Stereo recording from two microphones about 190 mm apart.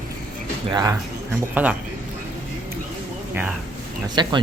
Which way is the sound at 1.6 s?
10° right (ahead or behind).